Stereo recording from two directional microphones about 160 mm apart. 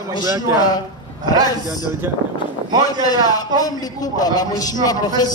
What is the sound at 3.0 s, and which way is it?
A man's voice, 25° left (ahead or behind).